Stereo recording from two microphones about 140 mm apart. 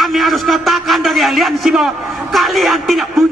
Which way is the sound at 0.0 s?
Centre (ahead or behind).